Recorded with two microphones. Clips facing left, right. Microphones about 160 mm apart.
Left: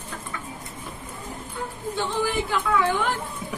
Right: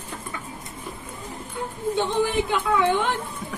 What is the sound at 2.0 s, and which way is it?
A woman's voice, 20° right (ahead or behind).